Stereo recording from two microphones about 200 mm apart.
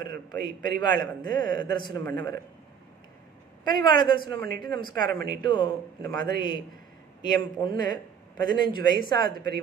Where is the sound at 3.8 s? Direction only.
25° left (ahead or behind).